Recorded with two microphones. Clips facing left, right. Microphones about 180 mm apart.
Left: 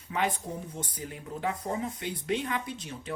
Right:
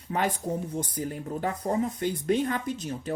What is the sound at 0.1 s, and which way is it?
Speech, 40° right (ahead or behind).